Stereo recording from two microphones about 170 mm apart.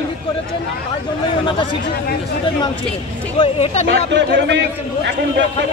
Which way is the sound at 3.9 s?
90° right.